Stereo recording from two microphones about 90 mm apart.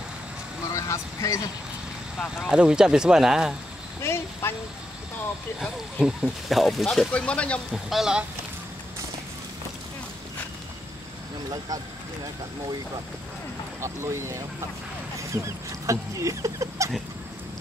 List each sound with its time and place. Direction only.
0.7 s speech: 35° left (ahead or behind)
2.3 s speech: 10° right (ahead or behind)
4.0 s a woman's voice: 30° left (ahead or behind)
5.6 s speech: 5° right (ahead or behind)
7.1 s speech: 15° left (ahead or behind)
7.7 s speech: 5° right (ahead or behind)
13.7 s speech: 30° right (ahead or behind)